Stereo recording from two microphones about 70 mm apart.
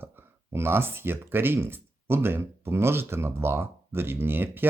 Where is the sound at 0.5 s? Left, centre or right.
Right.